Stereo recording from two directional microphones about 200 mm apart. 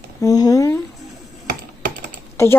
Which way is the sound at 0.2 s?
20° left (ahead or behind).